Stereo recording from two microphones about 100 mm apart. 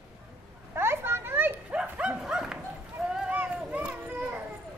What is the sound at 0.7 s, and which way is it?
Children playing, 25° right (ahead or behind).